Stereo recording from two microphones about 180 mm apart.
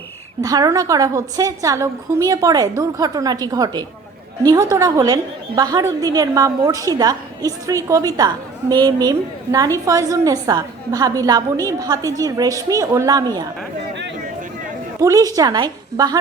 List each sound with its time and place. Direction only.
0.4 s a woman's voice: 20° right (ahead or behind)
15.0 s a woman's voice: 20° right (ahead or behind)